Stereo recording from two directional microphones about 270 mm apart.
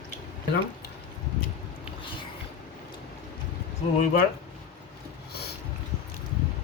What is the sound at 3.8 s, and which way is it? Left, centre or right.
Speech, left.